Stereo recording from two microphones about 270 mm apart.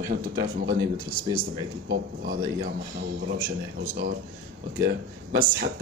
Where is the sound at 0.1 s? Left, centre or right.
Right.